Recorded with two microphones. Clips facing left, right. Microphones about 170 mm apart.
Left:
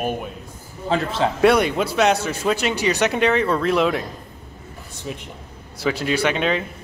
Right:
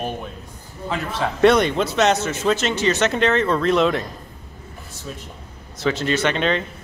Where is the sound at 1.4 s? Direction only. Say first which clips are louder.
Right 2 dB; 5° left (ahead or behind).